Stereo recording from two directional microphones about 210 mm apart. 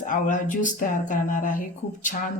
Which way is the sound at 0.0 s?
40° left (ahead or behind).